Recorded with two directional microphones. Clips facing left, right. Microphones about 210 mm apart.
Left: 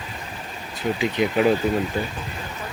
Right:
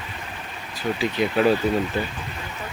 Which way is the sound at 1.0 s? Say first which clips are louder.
Even; 10° left (ahead or behind).